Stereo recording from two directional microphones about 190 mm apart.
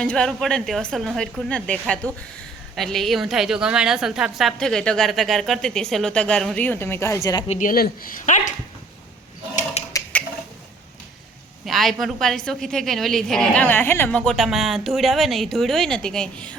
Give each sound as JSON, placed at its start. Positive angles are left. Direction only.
{"t": 0.0, "sound": "a woman's voice", "side_deg": 5}
{"t": 7.4, "sound": "speech", "side_deg": 40}
{"t": 9.9, "sound": "a sound", "side_deg": 10}
{"t": 11.6, "sound": "a woman's voice", "side_deg": 0}